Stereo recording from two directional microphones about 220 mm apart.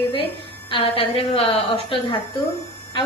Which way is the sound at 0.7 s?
25° left (ahead or behind).